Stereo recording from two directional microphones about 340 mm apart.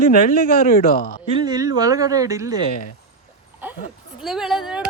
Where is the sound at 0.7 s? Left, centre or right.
Left.